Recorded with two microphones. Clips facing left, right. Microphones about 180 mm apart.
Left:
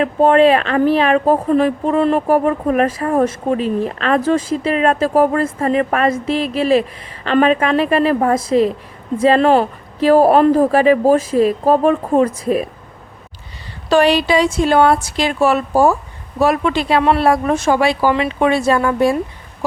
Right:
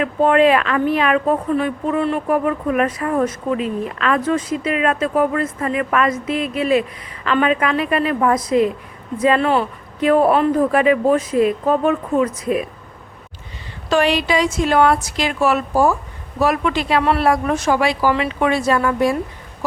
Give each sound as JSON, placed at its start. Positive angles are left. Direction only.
{"t": 0.0, "sound": "speech", "side_deg": 25}
{"t": 10.7, "sound": "a woman's voice", "side_deg": 30}
{"t": 13.9, "sound": "a woman's voice", "side_deg": 35}